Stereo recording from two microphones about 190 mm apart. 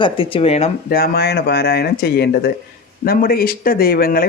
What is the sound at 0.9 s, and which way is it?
Speech, 55° left (ahead or behind).